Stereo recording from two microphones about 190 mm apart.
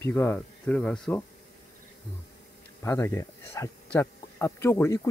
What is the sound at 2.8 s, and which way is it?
Speech, 15° left (ahead or behind).